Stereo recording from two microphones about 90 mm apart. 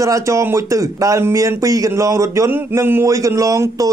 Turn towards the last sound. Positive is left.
turn(degrees=-40)  # may be behind; listen again after turning